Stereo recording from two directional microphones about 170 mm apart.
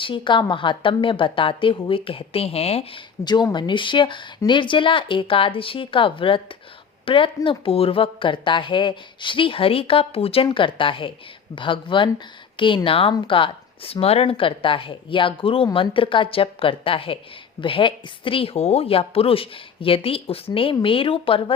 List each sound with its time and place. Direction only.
0.0 s a woman's voice: 30° left (ahead or behind)